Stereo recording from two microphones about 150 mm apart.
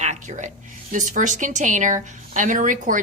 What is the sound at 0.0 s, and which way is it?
A woman's voice, 55° right (ahead or behind).